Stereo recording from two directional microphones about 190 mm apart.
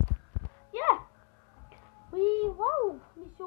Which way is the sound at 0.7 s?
15° right (ahead or behind).